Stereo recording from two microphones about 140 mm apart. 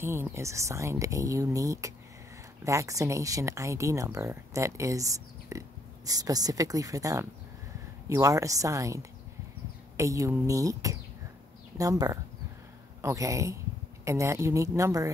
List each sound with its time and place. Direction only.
0.0 s speech: 15° right (ahead or behind)